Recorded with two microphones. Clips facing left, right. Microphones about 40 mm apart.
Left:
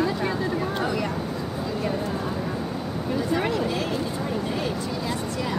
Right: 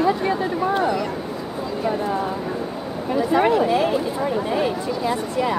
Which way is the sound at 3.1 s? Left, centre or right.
Centre.